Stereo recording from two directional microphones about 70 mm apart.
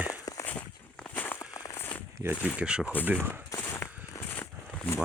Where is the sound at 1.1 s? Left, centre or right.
Left.